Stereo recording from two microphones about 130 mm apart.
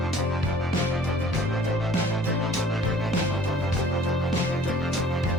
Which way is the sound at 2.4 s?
Centre (ahead or behind).